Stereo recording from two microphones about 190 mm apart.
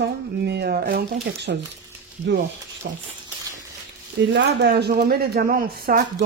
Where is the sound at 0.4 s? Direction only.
55° right (ahead or behind).